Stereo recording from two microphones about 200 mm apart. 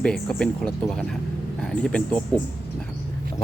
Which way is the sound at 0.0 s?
5° left (ahead or behind).